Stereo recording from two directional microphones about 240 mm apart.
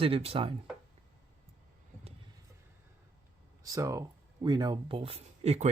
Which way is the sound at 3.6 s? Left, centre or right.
Centre.